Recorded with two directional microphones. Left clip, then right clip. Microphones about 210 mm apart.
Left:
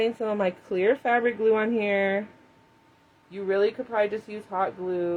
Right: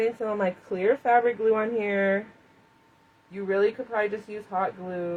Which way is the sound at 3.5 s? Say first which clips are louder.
Even; 45° left (ahead or behind).